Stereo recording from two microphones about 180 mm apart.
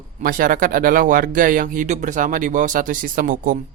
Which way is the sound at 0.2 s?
50° right (ahead or behind).